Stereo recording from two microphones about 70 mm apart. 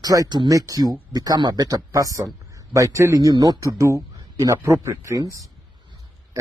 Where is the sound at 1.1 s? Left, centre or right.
Right.